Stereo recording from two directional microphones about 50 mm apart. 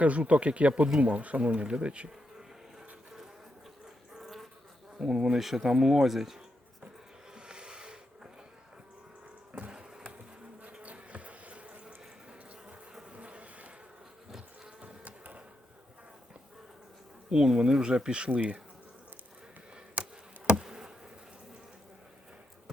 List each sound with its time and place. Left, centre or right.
0.0 s speech: right
2.7 s a sound: centre
4.9 s speech: centre
7.3 s a sound: centre
9.5 s printer: right
10.6 s bee: right
14.3 s insect: centre
14.8 s sheep: right
17.2 s speech: centre
20.6 s insect: centre